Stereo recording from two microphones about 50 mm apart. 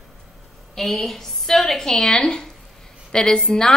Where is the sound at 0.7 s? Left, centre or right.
Centre.